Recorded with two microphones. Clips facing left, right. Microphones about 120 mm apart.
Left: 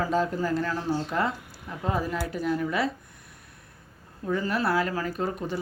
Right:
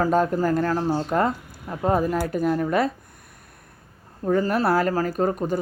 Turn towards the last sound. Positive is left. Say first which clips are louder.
# right 7 dB
turn(degrees=-45)  # may be behind; listen again after turning